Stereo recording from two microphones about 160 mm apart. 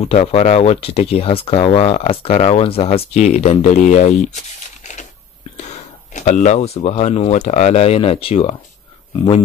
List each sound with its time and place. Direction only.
0.0 s speech: 40° left (ahead or behind)
5.7 s speech: 50° left (ahead or behind)